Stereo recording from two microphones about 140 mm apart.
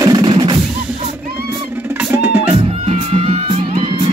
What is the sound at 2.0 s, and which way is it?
Music, 15° right (ahead or behind).